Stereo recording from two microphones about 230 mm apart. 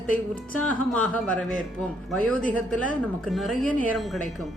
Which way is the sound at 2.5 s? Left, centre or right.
Left.